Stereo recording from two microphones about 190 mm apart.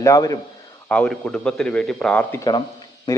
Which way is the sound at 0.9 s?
5° left (ahead or behind).